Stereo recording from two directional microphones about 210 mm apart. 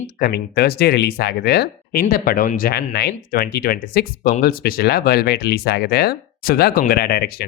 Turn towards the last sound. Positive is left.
turn(degrees=50)  # may be behind; listen again after turning